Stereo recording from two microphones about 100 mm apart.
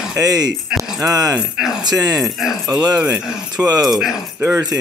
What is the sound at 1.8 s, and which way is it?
Speech, 40° right (ahead or behind).